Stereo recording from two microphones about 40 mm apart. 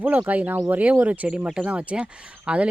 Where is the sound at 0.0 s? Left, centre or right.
Right.